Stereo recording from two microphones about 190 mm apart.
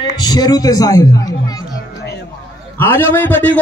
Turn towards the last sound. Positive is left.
turn(degrees=10)  # may be behind; listen again after turning